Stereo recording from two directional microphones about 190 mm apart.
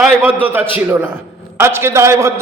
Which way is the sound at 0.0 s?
10° right (ahead or behind).